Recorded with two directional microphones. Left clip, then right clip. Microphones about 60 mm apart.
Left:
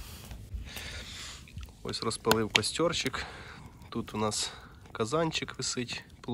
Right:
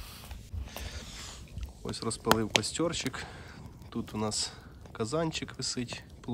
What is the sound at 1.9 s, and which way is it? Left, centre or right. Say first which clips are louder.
Speech: even; right.